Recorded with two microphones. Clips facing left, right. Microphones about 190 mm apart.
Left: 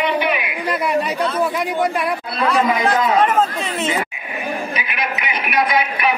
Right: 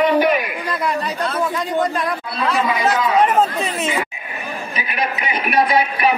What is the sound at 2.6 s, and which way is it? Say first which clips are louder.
Speech: left 1 dB; 45° left (ahead or behind).